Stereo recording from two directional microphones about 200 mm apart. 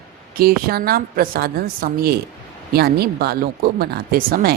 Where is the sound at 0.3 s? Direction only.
50° right (ahead or behind).